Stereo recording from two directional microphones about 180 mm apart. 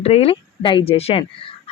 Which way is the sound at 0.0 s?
35° left (ahead or behind).